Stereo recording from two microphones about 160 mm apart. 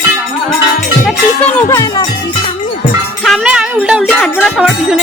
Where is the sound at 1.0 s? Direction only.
10° left (ahead or behind).